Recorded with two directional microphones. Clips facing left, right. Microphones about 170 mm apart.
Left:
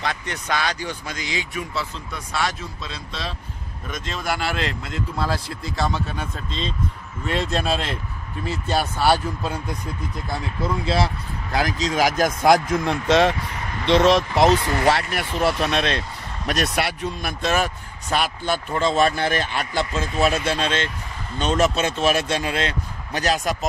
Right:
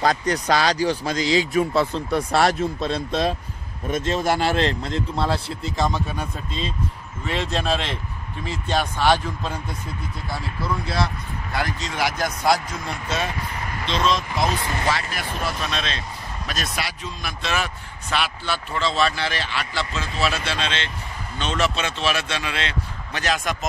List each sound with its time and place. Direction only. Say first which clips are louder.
0.0 s speech: right 7 dB; 40° right (ahead or behind)
2.0 s speech: right 7 dB; 60° right (ahead or behind)
3.8 s speech: right 7 dB; 35° right (ahead or behind)
5.9 s speech: right 1 dB; 15° right (ahead or behind)
7.2 s speech: left 1 dB; centre (ahead or behind)
11.9 s speech: left 6 dB; 45° left (ahead or behind)